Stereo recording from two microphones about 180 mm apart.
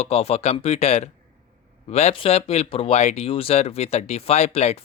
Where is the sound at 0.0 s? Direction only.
35° left (ahead or behind).